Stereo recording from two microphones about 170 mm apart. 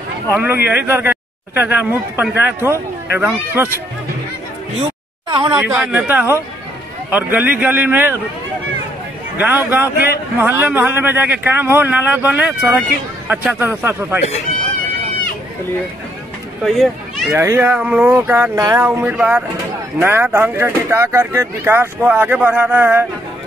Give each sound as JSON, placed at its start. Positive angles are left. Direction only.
{"t": 0.3, "sound": "speech", "side_deg": -15}
{"t": 5.3, "sound": "speech", "side_deg": -30}
{"t": 5.6, "sound": "speech", "side_deg": -10}
{"t": 9.4, "sound": "speech", "side_deg": -10}
{"t": 16.6, "sound": "speech", "side_deg": 0}
{"t": 17.3, "sound": "speech", "side_deg": -15}